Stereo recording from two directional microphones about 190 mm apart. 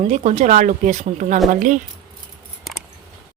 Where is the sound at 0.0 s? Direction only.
35° right (ahead or behind).